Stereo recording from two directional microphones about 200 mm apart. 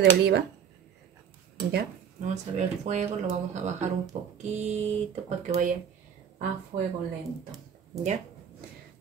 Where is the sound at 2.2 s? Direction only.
35° right (ahead or behind).